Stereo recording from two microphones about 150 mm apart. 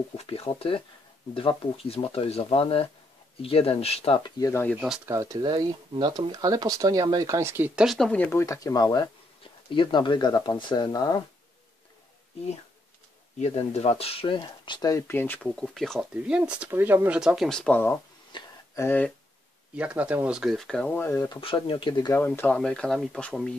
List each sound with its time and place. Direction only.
0.2 s speech: 40° left (ahead or behind)
4.4 s speech: 20° left (ahead or behind)
4.7 s speech: 5° right (ahead or behind)
5.0 s speech: 20° right (ahead or behind); by 11.1 s 25° left (ahead or behind)
13.4 s speech: 45° left (ahead or behind); by 15.4 s 15° left (ahead or behind)
15.4 s speech: centre (ahead or behind)
18.3 s a sound: 30° left (ahead or behind)
18.8 s speech: 10° left (ahead or behind)
19.7 s speech: 10° right (ahead or behind); by 21.3 s 15° left (ahead or behind)
21.3 s speech: 35° left (ahead or behind)
22.1 s speech: 15° left (ahead or behind)